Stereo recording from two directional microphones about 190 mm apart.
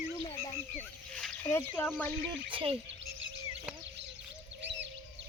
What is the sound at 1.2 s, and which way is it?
Speech, 10° left (ahead or behind).